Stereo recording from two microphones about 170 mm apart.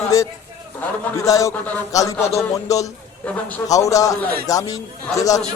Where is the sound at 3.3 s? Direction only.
10° left (ahead or behind).